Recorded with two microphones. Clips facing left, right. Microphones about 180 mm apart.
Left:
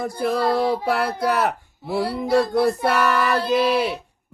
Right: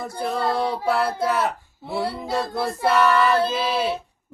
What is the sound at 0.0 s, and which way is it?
Child singing, 70° left (ahead or behind).